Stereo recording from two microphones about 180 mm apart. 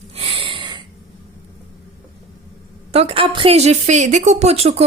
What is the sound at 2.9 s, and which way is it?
Speech, 30° right (ahead or behind).